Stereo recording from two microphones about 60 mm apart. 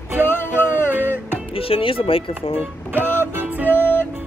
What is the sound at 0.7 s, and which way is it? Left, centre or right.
Music, right.